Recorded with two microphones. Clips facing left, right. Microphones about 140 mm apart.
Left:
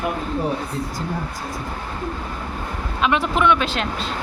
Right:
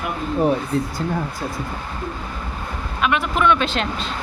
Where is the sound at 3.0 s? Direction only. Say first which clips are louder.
Left 1 dB; 25° left (ahead or behind).